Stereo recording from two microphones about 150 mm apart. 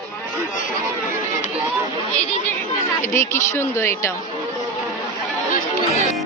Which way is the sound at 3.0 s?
15° left (ahead or behind).